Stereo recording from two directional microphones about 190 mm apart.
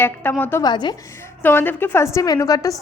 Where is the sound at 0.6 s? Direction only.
20° left (ahead or behind).